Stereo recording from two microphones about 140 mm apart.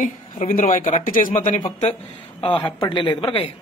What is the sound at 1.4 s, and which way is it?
Speech, 60° left (ahead or behind).